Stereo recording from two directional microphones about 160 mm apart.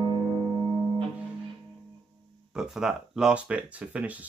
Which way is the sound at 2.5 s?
5° right (ahead or behind).